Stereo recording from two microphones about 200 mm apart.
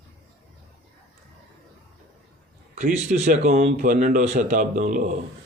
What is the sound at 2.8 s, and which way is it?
A man's voice, 40° right (ahead or behind).